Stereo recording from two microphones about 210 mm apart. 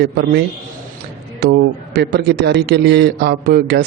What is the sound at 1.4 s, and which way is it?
A man's voice, 50° right (ahead or behind).